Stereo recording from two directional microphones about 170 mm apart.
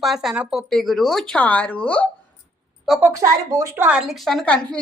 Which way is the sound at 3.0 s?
15° right (ahead or behind).